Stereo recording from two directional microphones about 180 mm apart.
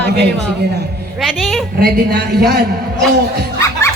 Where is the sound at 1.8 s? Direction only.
65° right (ahead or behind).